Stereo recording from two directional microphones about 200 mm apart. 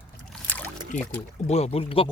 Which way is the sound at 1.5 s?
30° left (ahead or behind).